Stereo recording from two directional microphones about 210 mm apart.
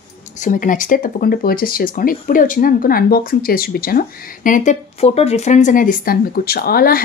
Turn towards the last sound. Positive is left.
turn(degrees=45)  # may be behind; listen again after turning